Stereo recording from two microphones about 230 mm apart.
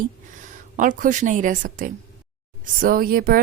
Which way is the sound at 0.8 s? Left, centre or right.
Right.